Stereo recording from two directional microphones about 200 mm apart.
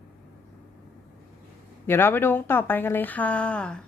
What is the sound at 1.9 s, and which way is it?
Speech, 10° left (ahead or behind).